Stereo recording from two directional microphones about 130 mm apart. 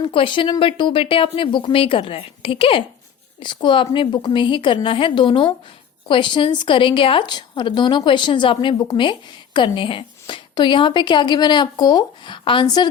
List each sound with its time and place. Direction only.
0.1 s a woman's voice: 40° left (ahead or behind)